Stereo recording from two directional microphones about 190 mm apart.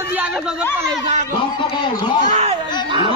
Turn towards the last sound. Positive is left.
turn(degrees=-30)  # may be behind; listen again after turning